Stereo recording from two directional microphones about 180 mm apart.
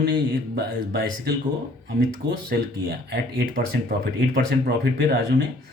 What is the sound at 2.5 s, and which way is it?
Speech, 65° right (ahead or behind).